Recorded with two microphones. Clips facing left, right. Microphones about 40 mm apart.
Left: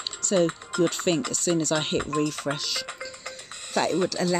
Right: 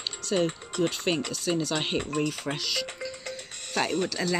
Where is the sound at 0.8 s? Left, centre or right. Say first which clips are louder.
Left 2 dB; centre.